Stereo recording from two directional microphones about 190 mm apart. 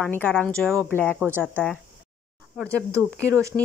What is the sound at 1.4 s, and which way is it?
Speech, 5° left (ahead or behind).